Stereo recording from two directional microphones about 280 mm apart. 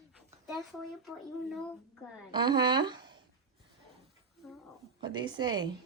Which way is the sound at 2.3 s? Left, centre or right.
Centre.